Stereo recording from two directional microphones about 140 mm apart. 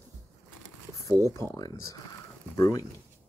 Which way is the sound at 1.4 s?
15° left (ahead or behind).